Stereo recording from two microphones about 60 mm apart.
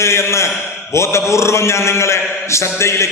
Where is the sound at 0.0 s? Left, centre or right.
Left.